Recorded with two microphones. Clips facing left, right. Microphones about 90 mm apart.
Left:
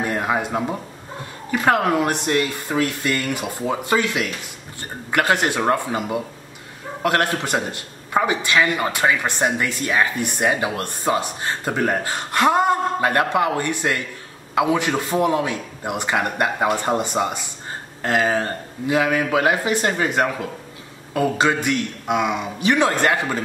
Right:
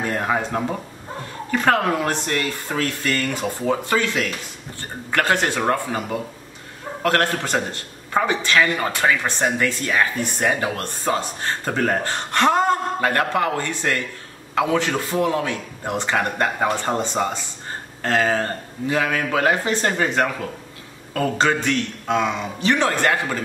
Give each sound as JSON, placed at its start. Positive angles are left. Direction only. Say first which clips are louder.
{"t": 0.0, "sound": "speech", "louder": "even", "side_deg": 15}